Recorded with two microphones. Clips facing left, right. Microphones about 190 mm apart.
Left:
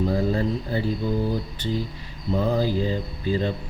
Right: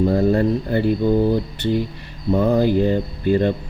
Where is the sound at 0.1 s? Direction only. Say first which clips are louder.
Right 6 dB; 60° right (ahead or behind).